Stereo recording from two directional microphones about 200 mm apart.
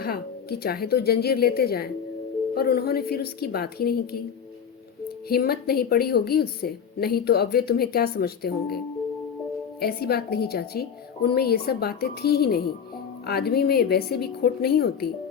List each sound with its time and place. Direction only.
0.0 s a woman's voice: 50° left (ahead or behind)
9.8 s a woman's voice: 50° left (ahead or behind)